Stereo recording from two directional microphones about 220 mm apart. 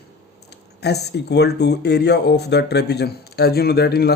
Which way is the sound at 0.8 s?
50° left (ahead or behind).